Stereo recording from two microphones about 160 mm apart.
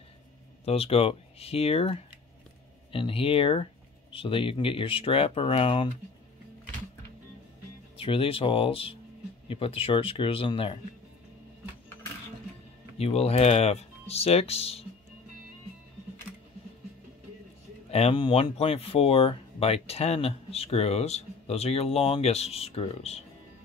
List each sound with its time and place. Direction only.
0.7 s speech: 40° left (ahead or behind)
8.0 s speech: 35° left (ahead or behind)
12.9 s speech: 40° left (ahead or behind)
17.9 s speech: 35° left (ahead or behind)